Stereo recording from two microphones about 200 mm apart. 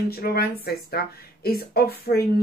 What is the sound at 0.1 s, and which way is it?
Speech, 50° left (ahead or behind).